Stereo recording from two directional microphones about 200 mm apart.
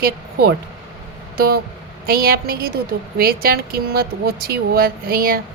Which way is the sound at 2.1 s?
45° right (ahead or behind).